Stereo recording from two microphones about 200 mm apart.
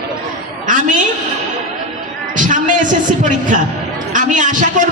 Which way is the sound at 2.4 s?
40° right (ahead or behind).